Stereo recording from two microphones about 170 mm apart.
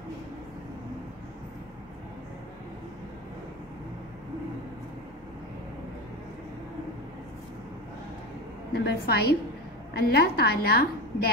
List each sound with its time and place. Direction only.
8.7 s a woman's voice: 70° left (ahead or behind)